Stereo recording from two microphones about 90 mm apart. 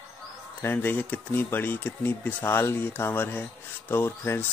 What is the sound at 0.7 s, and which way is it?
Speech, 20° left (ahead or behind).